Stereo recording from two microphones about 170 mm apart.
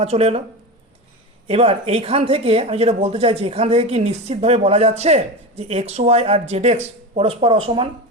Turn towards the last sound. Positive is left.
turn(degrees=-30)  # may be behind; listen again after turning